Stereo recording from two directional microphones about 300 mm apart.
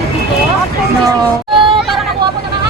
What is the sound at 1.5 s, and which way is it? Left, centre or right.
Hubbub, centre.